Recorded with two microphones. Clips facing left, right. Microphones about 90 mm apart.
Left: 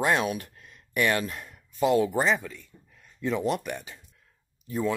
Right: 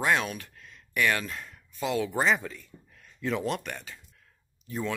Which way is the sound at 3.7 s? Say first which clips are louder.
Left 4 dB; 15° left (ahead or behind).